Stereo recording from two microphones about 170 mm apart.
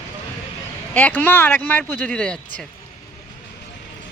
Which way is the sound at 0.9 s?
10° left (ahead or behind).